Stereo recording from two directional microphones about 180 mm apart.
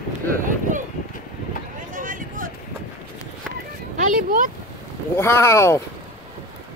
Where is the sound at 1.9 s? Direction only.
45° right (ahead or behind).